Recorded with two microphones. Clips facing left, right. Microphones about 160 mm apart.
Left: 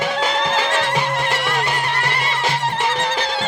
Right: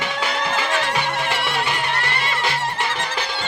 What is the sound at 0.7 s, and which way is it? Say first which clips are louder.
Music: left 2 dB; 90° left.